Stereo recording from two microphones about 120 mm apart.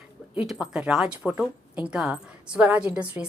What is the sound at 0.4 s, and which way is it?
Speech, 5° right (ahead or behind).